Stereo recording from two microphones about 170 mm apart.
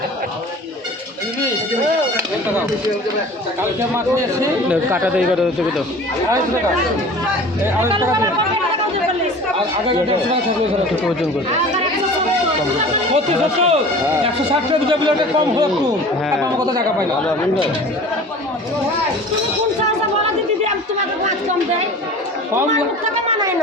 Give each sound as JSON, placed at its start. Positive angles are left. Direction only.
{"t": 4.7, "sound": "speech", "side_deg": -10}
{"t": 8.0, "sound": "a man's voice", "side_deg": -20}
{"t": 13.1, "sound": "speech", "side_deg": -40}
{"t": 16.4, "sound": "a man's voice", "side_deg": -25}